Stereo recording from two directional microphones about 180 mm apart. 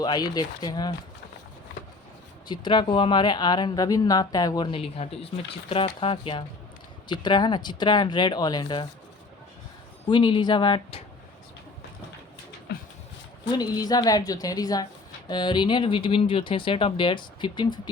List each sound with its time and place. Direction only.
0.0 s speech: 20° left (ahead or behind)
2.5 s speech: 25° left (ahead or behind)
10.1 s speech: 25° left (ahead or behind)
12.7 s a sound: 65° left (ahead or behind)
13.6 s speech: 20° left (ahead or behind)